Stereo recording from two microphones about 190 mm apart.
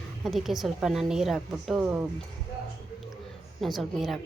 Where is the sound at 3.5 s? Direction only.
Centre (ahead or behind).